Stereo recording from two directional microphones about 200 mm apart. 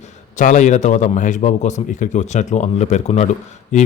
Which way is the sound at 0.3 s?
40° left (ahead or behind).